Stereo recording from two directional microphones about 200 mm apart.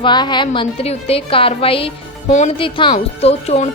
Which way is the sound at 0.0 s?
20° left (ahead or behind).